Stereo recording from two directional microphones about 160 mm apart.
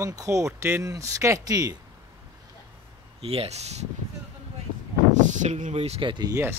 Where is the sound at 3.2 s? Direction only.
40° right (ahead or behind).